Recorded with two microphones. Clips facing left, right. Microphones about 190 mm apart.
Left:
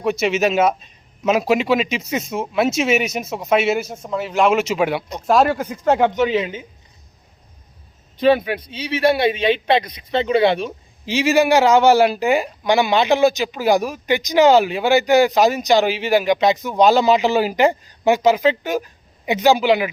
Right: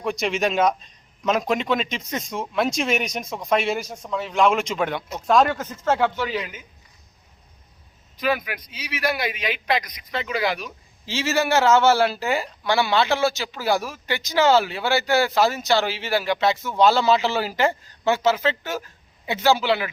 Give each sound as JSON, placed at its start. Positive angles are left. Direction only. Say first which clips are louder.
{"t": 0.0, "sound": "a man's voice", "louder": "left 5 dB", "side_deg": 5}
{"t": 8.1, "sound": "speech", "louder": "left 9 dB", "side_deg": 30}
{"t": 11.0, "sound": "speech", "louder": "left 7 dB", "side_deg": 15}